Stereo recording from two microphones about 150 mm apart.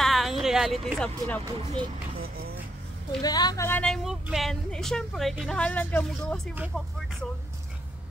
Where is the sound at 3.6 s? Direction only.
10° left (ahead or behind).